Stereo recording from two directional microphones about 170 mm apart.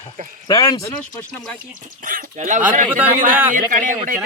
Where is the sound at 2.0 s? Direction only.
55° right (ahead or behind).